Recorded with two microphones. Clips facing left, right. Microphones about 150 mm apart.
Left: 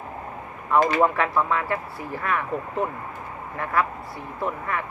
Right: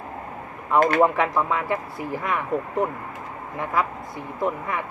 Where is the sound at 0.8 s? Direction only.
60° right (ahead or behind).